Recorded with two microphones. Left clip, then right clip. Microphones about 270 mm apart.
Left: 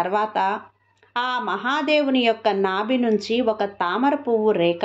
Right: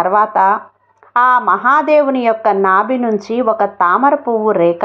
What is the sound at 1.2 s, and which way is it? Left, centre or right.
A woman's voice, centre.